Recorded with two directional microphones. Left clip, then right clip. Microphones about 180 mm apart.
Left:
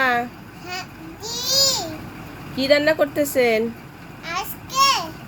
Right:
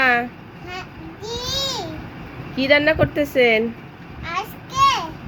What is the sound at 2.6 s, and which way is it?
A woman's voice, 5° left (ahead or behind).